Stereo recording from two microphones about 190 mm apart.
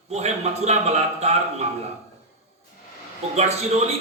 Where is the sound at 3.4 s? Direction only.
35° right (ahead or behind).